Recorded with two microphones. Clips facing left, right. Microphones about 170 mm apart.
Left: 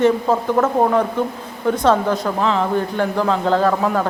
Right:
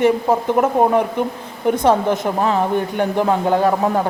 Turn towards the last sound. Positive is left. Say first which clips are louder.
# right 1 dB
turn(degrees=-20)  # may be behind; listen again after turning